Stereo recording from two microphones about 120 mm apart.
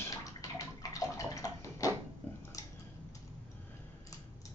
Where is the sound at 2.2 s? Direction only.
10° left (ahead or behind).